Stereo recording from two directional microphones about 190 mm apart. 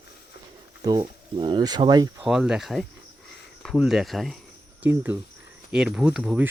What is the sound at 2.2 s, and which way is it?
Speech, 5° right (ahead or behind).